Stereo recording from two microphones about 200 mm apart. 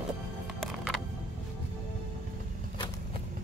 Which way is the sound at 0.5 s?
Centre (ahead or behind).